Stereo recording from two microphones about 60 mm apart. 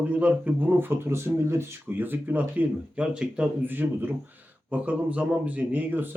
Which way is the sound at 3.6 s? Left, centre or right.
Right.